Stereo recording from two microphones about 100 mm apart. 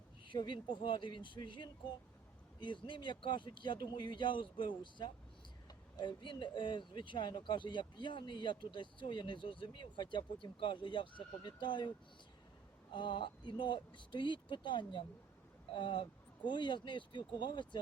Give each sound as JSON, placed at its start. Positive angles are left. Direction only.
{"t": 0.3, "sound": "speech", "side_deg": 50}
{"t": 12.9, "sound": "speech", "side_deg": 50}